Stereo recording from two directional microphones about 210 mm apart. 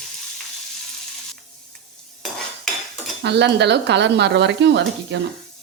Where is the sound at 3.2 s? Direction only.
55° right (ahead or behind).